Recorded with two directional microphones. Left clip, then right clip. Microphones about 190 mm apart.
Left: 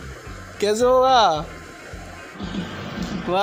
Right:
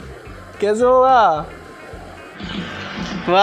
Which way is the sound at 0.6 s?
Centre (ahead or behind).